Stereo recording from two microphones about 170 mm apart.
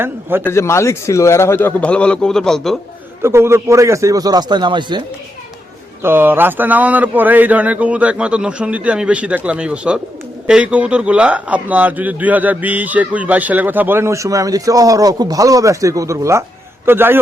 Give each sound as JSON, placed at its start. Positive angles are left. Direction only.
{"t": 0.0, "sound": "a man's voice", "side_deg": -15}
{"t": 0.4, "sound": "a man's voice", "side_deg": 15}
{"t": 3.2, "sound": "a man's voice", "side_deg": -15}
{"t": 6.0, "sound": "a man's voice", "side_deg": -15}